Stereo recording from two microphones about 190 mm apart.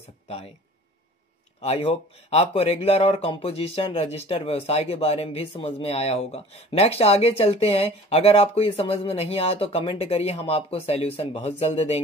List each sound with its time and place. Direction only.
1.6 s speech: 35° left (ahead or behind)